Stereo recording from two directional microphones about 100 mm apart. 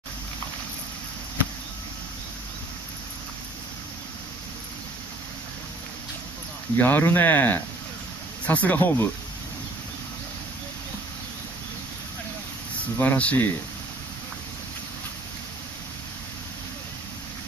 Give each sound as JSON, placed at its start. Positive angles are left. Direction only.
{"t": 6.8, "sound": "speech", "side_deg": 20}
{"t": 12.9, "sound": "speech", "side_deg": 15}